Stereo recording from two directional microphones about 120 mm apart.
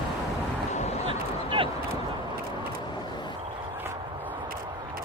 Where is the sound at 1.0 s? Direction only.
45° right (ahead or behind).